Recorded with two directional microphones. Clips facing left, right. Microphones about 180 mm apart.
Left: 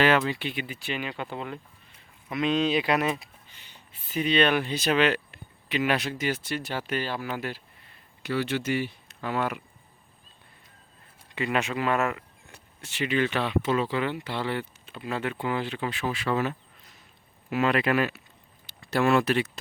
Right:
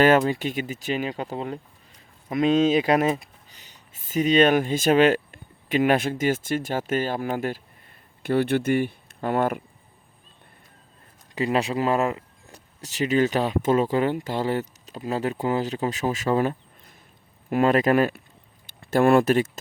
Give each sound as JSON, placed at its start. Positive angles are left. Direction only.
{"t": 0.0, "sound": "speech", "side_deg": -45}
{"t": 11.3, "sound": "speech", "side_deg": -35}
{"t": 18.6, "sound": "speech", "side_deg": -55}